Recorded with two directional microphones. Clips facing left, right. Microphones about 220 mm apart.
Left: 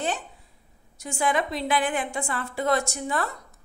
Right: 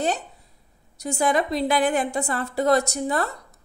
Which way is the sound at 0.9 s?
40° right (ahead or behind).